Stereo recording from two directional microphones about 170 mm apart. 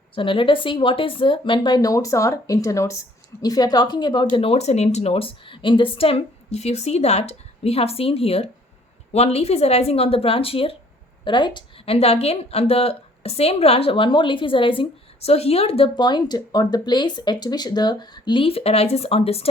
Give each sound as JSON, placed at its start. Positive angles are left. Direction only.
{"t": 0.1, "sound": "speech", "side_deg": 30}
{"t": 4.4, "sound": "a woman's voice", "side_deg": 35}